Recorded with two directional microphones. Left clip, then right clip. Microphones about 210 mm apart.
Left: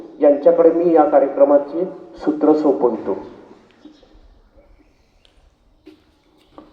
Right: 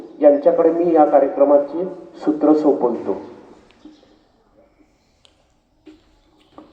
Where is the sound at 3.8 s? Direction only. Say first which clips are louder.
Even; 45° left (ahead or behind).